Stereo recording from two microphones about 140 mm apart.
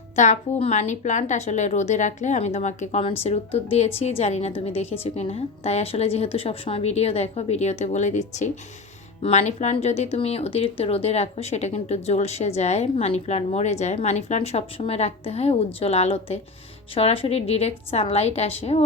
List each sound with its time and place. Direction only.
0.2 s a woman's voice: 60° left (ahead or behind)